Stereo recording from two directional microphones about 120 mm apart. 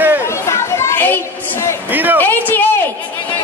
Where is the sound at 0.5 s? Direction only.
20° left (ahead or behind).